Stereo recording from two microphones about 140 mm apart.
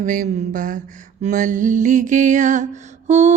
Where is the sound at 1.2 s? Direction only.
70° right (ahead or behind).